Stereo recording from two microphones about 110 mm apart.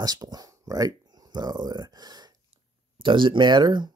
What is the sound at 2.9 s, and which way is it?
Speech, 50° right (ahead or behind).